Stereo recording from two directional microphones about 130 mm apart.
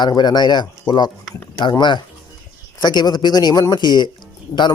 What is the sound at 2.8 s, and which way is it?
A man's voice, 35° left (ahead or behind).